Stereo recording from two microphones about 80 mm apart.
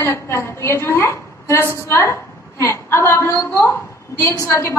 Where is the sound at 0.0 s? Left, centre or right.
Left.